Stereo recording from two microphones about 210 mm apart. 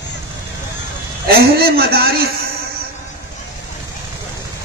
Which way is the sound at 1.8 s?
50° right (ahead or behind).